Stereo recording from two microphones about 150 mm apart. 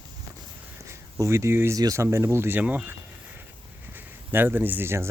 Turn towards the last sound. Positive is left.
turn(degrees=-15)  # may be behind; listen again after turning